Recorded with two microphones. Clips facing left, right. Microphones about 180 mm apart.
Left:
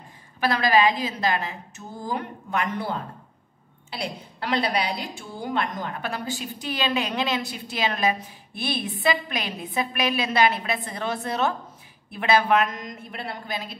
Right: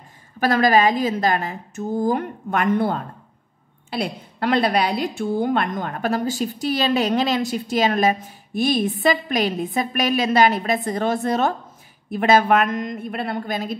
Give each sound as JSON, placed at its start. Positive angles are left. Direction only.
{"t": 0.4, "sound": "a woman's voice", "side_deg": -45}